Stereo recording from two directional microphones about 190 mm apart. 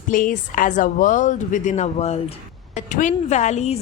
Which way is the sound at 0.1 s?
45° left (ahead or behind).